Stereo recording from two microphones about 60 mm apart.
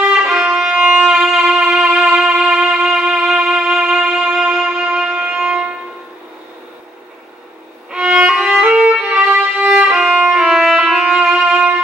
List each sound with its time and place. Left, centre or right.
0.1 s music: centre
7.9 s violin: centre
8.4 s music: centre
8.7 s violin: centre